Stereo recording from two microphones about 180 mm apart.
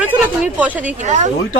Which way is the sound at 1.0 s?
40° right (ahead or behind).